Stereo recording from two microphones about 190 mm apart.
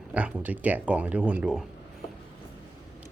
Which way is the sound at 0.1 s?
5° right (ahead or behind).